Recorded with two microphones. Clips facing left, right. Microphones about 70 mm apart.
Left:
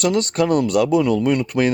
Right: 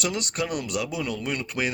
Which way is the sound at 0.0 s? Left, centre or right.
Left.